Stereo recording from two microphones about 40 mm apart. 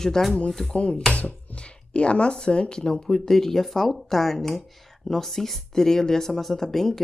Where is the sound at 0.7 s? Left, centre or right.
Left.